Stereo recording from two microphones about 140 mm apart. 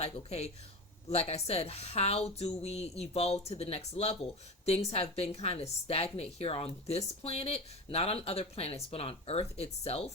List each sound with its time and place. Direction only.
0.0 s a woman's voice: 50° left (ahead or behind)